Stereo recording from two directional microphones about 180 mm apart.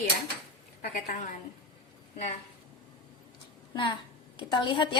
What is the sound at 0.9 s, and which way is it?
Speech, 50° left (ahead or behind).